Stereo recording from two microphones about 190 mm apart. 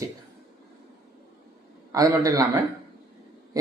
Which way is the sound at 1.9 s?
15° right (ahead or behind).